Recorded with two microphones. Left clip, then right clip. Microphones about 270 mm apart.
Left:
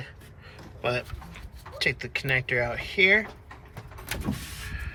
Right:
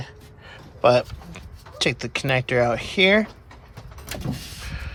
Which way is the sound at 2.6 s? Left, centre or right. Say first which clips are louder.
Right 6 dB; right.